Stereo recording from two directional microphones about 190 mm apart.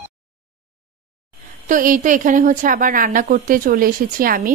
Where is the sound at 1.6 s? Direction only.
45° right (ahead or behind).